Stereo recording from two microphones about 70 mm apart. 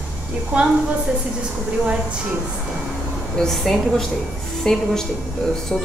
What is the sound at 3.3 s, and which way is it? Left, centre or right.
A woman's voice, centre.